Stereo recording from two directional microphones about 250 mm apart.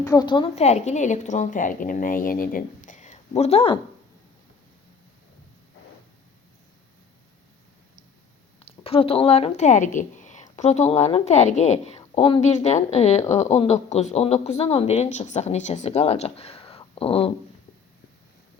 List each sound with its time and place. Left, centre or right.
0.0 s speech: centre
8.5 s speech: left